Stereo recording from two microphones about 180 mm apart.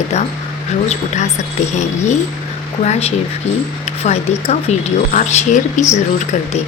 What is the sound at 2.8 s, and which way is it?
Speech, 35° left (ahead or behind).